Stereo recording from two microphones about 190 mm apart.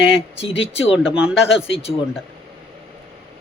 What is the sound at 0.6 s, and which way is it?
Mantra, 30° left (ahead or behind).